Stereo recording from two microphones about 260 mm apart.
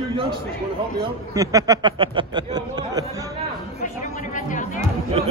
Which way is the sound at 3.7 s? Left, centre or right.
Left.